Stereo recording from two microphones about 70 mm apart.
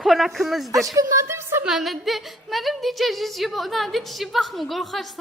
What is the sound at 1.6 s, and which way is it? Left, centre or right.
Speech, centre.